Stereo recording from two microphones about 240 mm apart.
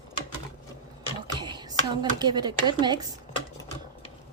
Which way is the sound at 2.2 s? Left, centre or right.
Centre.